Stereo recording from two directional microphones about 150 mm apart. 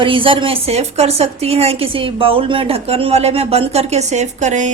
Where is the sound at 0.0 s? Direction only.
35° right (ahead or behind).